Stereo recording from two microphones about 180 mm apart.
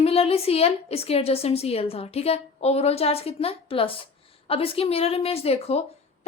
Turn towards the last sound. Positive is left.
turn(degrees=35)  # may be behind; listen again after turning